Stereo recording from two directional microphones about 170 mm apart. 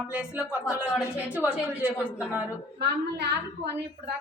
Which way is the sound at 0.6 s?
20° left (ahead or behind).